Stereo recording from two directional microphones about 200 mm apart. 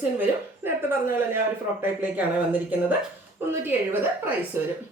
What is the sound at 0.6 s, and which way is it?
Speech, 10° right (ahead or behind).